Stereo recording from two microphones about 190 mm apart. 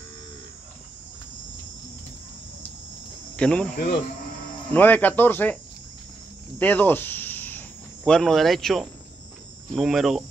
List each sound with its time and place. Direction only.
3.3 s speech: 5° left (ahead or behind)
3.7 s speech: 60° left (ahead or behind)
4.6 s speech: 10° left (ahead or behind)
6.6 s speech: 10° left (ahead or behind)